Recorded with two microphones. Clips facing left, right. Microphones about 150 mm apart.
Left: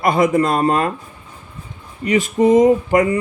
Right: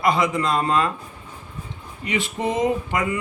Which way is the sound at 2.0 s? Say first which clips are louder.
Left 10 dB; 40° left (ahead or behind).